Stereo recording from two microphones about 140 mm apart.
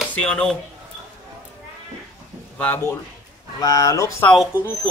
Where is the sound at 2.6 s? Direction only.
15° left (ahead or behind).